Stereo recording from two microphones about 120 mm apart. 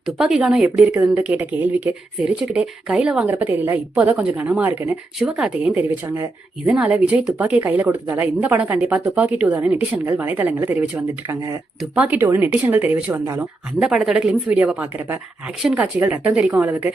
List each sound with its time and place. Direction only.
0.2 s a woman's voice: 5° right (ahead or behind)
11.3 s speech: 25° right (ahead or behind)
11.8 s a woman's voice: 10° right (ahead or behind)
13.7 s a woman's voice: 5° right (ahead or behind)